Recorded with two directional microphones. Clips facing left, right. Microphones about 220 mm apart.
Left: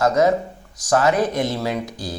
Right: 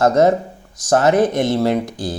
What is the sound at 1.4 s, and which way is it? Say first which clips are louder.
Speech: right 7 dB; 55° right (ahead or behind).